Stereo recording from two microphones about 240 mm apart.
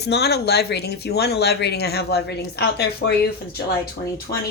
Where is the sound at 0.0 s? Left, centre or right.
Left.